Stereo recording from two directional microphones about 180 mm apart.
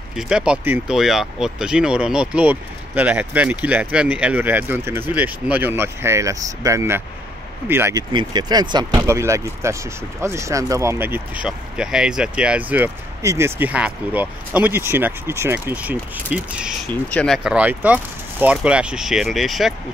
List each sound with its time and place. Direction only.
0.1 s speech: 5° right (ahead or behind)
8.1 s speech: 25° right (ahead or behind); by 16.7 s 5° right (ahead or behind)
17.1 s speech: 5° left (ahead or behind)
17.4 s speech: 5° right (ahead or behind)